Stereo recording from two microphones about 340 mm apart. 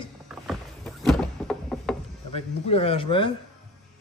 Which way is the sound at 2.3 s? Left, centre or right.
Centre.